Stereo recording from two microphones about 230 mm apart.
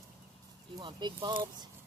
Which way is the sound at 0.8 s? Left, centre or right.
Centre.